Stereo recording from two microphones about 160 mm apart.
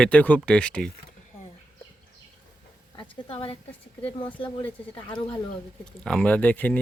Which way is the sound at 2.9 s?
30° left (ahead or behind).